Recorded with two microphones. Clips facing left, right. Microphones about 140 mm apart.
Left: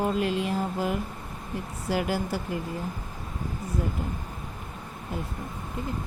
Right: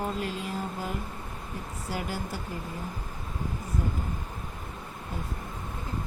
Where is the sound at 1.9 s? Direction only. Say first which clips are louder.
Left 7 dB; 90° left.